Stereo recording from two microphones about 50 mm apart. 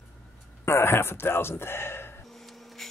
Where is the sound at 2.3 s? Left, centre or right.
Centre.